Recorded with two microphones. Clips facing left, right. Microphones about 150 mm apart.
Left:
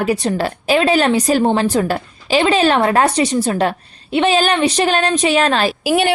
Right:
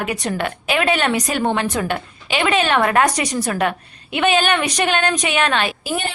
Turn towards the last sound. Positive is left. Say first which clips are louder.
# left 9 dB
turn(degrees=90)